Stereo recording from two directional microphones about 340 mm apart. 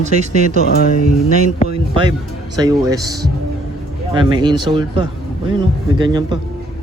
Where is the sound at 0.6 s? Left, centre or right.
Left.